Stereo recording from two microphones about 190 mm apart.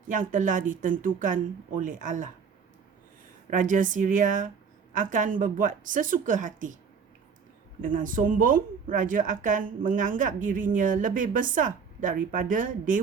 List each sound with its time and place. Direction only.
0.1 s a woman's voice: 45° right (ahead or behind)
3.5 s a woman's voice: 45° right (ahead or behind)
7.8 s a woman's voice: 45° right (ahead or behind)